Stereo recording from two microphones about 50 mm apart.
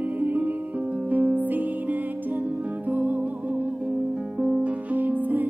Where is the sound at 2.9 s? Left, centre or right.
Right.